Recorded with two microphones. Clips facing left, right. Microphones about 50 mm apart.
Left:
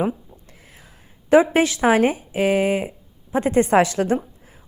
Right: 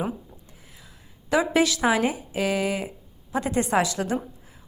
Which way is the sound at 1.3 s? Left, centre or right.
Left.